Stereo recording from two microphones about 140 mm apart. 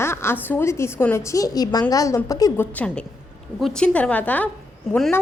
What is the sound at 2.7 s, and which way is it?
A woman's voice, 10° left (ahead or behind).